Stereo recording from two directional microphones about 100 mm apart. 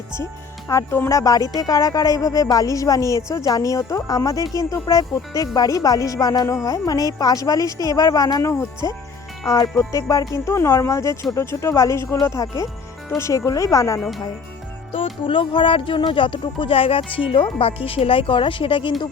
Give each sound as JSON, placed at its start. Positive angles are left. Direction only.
{"t": 0.7, "sound": "speech", "side_deg": 25}
{"t": 14.9, "sound": "speech", "side_deg": 60}